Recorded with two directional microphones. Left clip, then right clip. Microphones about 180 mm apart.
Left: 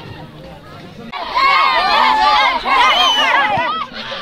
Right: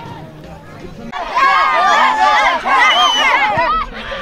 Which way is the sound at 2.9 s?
35° left (ahead or behind).